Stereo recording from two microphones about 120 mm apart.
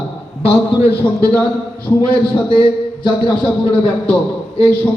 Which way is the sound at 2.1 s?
45° left (ahead or behind).